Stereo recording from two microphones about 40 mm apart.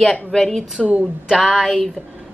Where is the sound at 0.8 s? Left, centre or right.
Right.